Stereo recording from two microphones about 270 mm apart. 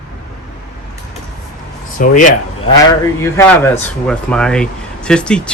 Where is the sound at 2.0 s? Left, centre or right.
Left.